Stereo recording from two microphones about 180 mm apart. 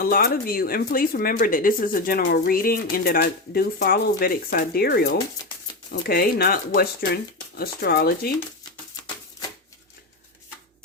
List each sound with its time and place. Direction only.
0.0 s speech: 55° left (ahead or behind)